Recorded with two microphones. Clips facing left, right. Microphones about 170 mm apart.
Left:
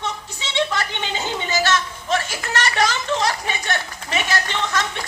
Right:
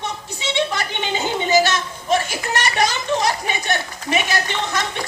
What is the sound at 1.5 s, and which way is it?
Speech, 15° right (ahead or behind).